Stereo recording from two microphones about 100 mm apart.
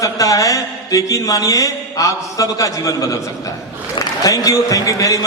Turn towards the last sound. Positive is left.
turn(degrees=35)  # may be behind; listen again after turning